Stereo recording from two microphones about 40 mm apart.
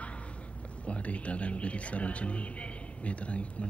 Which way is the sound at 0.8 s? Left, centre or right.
Left.